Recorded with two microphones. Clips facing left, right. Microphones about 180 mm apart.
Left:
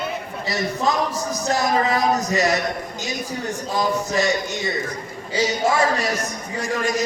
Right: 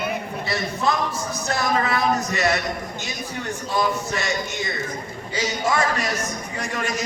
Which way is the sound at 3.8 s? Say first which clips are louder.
Left 3 dB; 35° left (ahead or behind).